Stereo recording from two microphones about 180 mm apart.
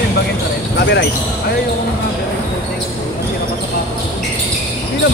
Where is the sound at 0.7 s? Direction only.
70° left (ahead or behind).